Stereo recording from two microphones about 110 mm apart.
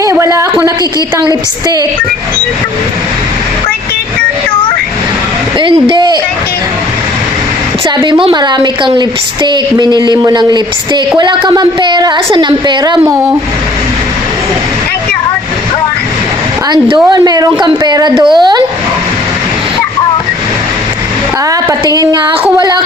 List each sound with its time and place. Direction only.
0.0 s a sound: 30° right (ahead or behind)
8.2 s a woman's voice: 40° right (ahead or behind)
13.1 s speech: 25° right (ahead or behind)
16.6 s a woman's voice: 45° right (ahead or behind)
21.5 s a woman's voice: 35° right (ahead or behind)